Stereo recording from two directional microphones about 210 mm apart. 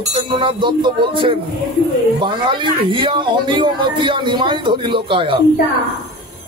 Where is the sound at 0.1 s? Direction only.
25° right (ahead or behind).